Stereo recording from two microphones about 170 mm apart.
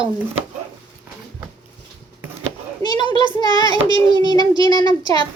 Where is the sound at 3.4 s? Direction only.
25° left (ahead or behind).